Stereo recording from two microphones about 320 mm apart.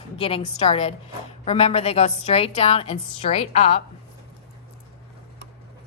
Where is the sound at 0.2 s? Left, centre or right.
Centre.